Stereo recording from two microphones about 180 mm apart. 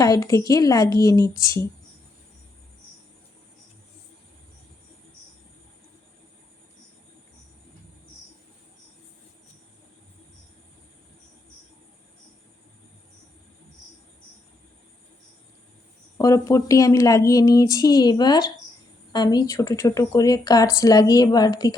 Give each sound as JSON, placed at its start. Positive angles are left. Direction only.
{"t": 0.0, "sound": "a woman's voice", "side_deg": 20}
{"t": 16.1, "sound": "a woman's voice", "side_deg": 20}